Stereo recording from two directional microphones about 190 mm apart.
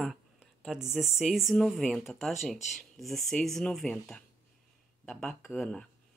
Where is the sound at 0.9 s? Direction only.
5° right (ahead or behind).